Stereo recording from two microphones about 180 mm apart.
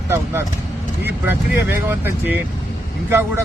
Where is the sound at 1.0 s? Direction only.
10° right (ahead or behind).